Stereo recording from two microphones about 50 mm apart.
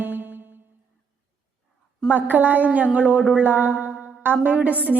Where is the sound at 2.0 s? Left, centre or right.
Right.